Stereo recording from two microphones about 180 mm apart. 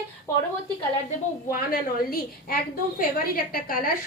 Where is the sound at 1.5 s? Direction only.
55° left (ahead or behind).